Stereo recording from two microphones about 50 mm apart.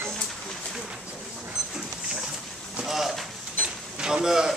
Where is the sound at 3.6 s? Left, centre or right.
Centre.